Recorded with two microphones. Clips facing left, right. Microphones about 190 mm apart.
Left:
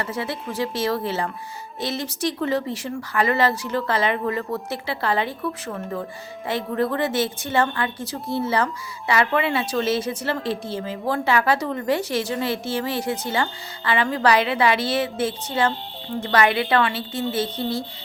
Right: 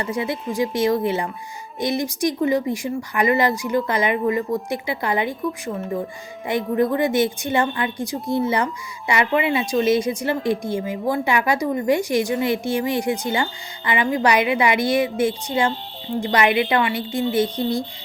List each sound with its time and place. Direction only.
0.0 s a woman's voice: 15° right (ahead or behind)